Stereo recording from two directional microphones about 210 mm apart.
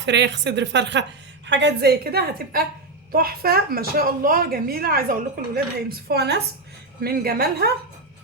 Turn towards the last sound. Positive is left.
turn(degrees=-50)  # may be behind; listen again after turning